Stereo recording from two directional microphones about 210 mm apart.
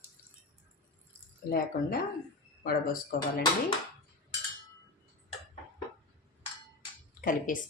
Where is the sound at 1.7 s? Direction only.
35° left (ahead or behind).